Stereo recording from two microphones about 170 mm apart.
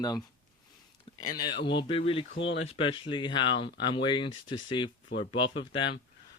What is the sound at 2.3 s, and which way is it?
Speech, 90° left.